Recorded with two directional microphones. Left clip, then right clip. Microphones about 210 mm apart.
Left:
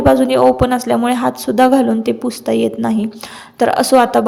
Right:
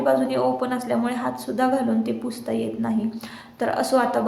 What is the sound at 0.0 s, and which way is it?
A woman's voice, 40° left (ahead or behind).